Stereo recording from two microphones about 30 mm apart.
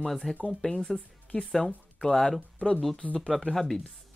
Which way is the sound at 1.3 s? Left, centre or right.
Left.